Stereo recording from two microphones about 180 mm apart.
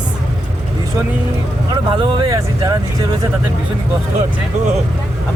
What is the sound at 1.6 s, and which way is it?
Speech, 25° right (ahead or behind).